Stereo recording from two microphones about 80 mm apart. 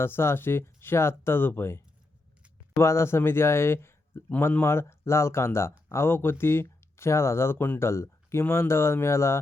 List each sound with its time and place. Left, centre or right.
0.0 s speech: left
4.3 s speech: left